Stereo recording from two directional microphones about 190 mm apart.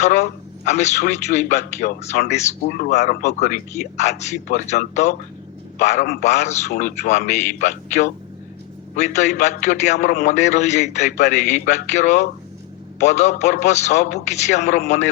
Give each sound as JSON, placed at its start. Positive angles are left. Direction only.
{"t": 0.0, "sound": "a man's voice", "side_deg": 40}
{"t": 2.6, "sound": "a man's voice", "side_deg": 50}